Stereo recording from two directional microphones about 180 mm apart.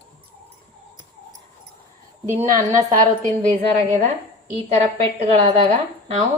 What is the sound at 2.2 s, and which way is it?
Speech, 15° right (ahead or behind).